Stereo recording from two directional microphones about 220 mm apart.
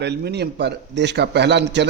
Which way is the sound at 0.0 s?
50° right (ahead or behind).